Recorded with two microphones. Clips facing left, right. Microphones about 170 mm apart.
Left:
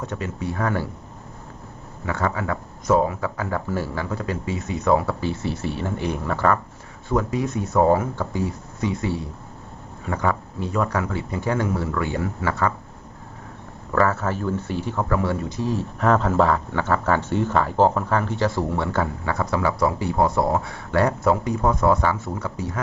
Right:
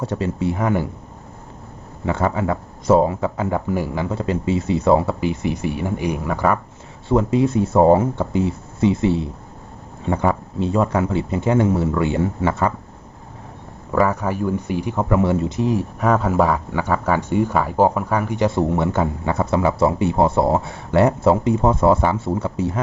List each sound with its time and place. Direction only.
0.0 s speech: 30° right (ahead or behind)
2.0 s speech: 25° right (ahead or behind)
7.1 s speech: 25° right (ahead or behind)
13.9 s speech: 15° right (ahead or behind)